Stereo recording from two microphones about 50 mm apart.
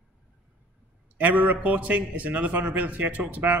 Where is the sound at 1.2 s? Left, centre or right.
Right.